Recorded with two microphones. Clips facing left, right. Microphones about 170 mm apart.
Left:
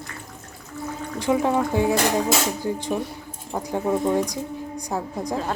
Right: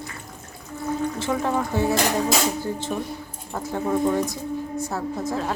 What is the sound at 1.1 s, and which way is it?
Speech, 15° left (ahead or behind).